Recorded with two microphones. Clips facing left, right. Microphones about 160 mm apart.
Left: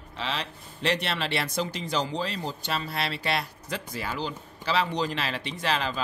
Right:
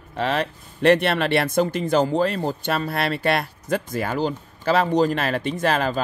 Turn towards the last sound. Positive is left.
turn(degrees=-50)  # may be behind; listen again after turning